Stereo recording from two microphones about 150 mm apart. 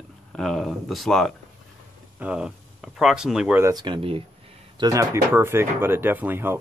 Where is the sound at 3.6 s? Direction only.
30° right (ahead or behind).